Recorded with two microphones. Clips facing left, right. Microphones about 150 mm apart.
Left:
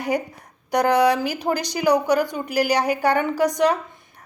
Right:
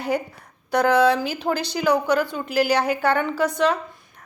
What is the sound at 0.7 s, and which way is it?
Speech, 15° left (ahead or behind).